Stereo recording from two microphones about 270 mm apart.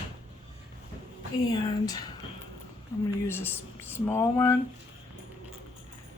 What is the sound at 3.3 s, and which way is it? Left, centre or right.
Speech, centre.